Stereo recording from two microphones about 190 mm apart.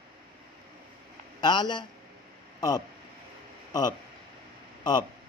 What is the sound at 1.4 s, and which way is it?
A man's voice, 25° left (ahead or behind).